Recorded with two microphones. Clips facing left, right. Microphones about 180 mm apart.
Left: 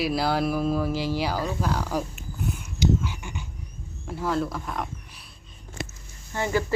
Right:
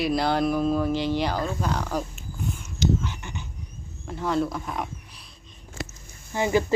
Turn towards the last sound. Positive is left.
turn(degrees=-15)  # may be behind; listen again after turning